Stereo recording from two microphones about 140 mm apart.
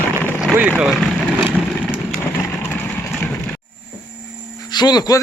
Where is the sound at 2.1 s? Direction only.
20° left (ahead or behind).